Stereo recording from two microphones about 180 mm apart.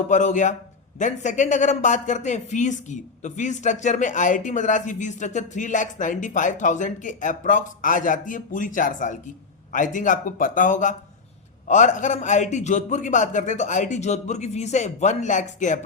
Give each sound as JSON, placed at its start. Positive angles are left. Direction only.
{"t": 0.1, "sound": "speech", "side_deg": 45}